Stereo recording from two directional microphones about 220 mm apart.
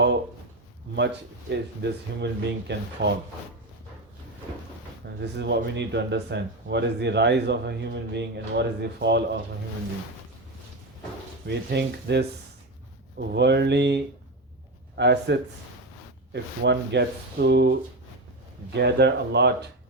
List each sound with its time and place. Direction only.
0.9 s speech: 50° right (ahead or behind)
5.2 s speech: 50° right (ahead or behind)
11.4 s speech: 50° right (ahead or behind)
13.3 s speech: 50° right (ahead or behind)